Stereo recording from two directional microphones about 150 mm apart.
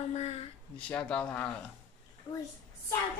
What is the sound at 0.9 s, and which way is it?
Speech, 10° left (ahead or behind).